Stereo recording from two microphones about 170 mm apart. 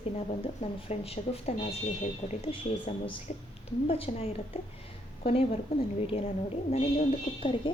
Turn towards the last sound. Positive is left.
turn(degrees=35)  # may be behind; listen again after turning